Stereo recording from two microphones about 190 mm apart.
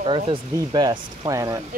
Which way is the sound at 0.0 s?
30° right (ahead or behind).